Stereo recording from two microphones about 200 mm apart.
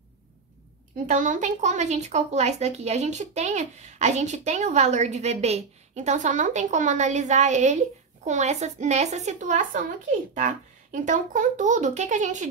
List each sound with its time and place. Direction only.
1.0 s speech: 40° right (ahead or behind)